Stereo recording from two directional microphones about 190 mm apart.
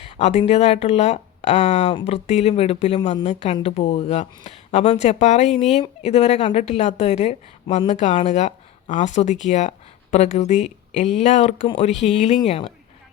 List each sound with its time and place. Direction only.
0.0 s a woman's voice: 35° left (ahead or behind)